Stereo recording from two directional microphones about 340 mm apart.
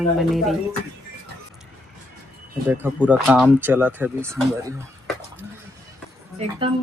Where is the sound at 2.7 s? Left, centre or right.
Centre.